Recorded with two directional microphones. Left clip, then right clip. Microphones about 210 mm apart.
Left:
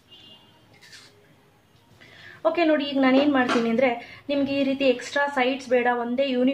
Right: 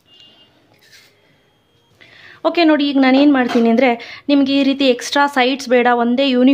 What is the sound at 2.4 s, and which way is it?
A woman's voice, 50° right (ahead or behind).